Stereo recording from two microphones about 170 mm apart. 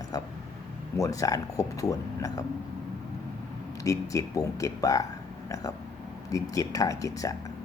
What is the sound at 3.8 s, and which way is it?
Speech, 20° left (ahead or behind).